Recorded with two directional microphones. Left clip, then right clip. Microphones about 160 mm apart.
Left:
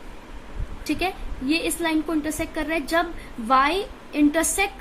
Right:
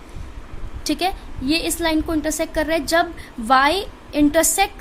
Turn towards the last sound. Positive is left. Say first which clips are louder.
# right 4 dB
turn(degrees=-60)  # may be behind; listen again after turning